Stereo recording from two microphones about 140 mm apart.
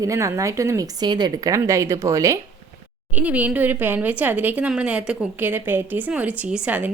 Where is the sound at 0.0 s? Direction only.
20° right (ahead or behind).